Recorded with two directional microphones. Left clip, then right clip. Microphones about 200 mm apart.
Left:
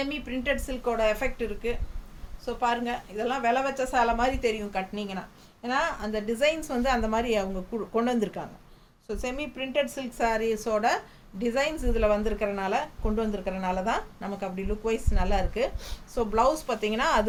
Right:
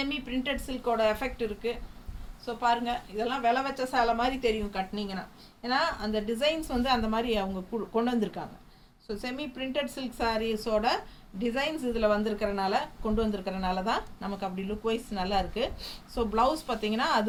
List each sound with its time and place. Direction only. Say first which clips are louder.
0.0 s a woman's voice: left 2 dB; 15° left (ahead or behind)